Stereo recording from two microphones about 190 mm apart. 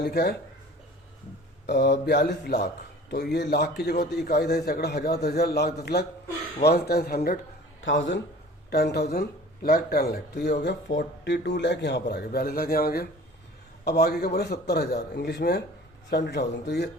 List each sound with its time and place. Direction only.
0.0 s a man's voice: 55° left (ahead or behind)
1.6 s a man's voice: 60° left (ahead or behind)
7.8 s a man's voice: 85° left
8.7 s a man's voice: 60° left (ahead or behind)